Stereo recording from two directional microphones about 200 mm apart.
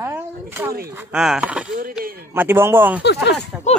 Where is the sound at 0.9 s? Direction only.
5° right (ahead or behind).